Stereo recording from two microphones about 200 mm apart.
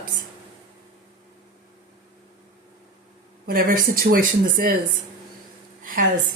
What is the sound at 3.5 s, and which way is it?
A woman's voice, 45° right (ahead or behind).